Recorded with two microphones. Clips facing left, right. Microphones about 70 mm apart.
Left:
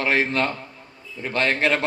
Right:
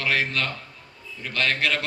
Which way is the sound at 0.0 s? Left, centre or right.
Left.